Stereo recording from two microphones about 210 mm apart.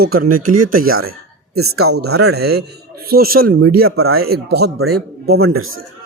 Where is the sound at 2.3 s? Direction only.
50° right (ahead or behind).